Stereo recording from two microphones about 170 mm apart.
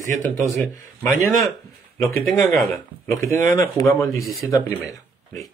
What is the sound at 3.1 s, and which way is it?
Speech, 15° left (ahead or behind).